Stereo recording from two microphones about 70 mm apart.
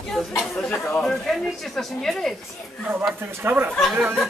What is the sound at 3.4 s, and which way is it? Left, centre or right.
Speech, right.